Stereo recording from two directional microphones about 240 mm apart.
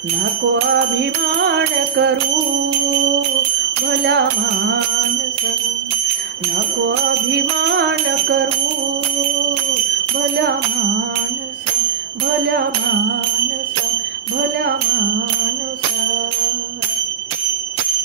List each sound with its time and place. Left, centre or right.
1.4 s music: right
7.3 s music: right